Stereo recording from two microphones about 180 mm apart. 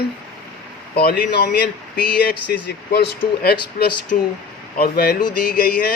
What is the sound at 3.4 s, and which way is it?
Speech, 60° left (ahead or behind).